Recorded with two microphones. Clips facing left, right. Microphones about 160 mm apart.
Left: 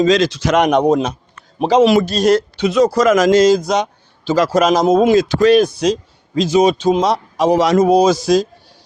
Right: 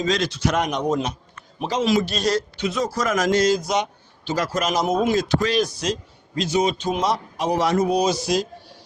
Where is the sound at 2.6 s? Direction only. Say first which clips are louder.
Left 11 dB; 80° left; by 5.9 s 60° left (ahead or behind).